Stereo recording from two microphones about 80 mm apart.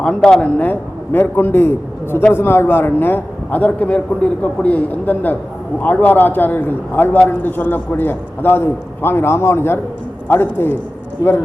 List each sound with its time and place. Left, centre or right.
0.0 s a man's voice: centre; by 11.4 s left